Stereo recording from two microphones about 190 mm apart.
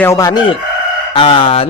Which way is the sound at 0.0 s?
15° left (ahead or behind).